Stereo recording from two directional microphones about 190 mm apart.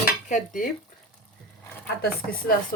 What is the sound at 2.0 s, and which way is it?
Dishes, 50° left (ahead or behind).